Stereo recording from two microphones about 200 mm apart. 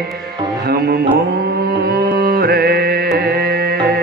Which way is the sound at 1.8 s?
50° right (ahead or behind).